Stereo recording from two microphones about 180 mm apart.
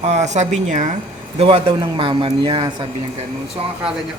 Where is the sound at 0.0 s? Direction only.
40° right (ahead or behind).